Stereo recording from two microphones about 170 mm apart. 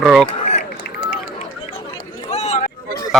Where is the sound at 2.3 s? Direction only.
40° left (ahead or behind).